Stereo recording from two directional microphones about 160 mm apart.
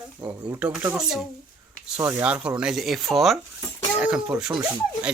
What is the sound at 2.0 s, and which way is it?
Speech, 15° right (ahead or behind).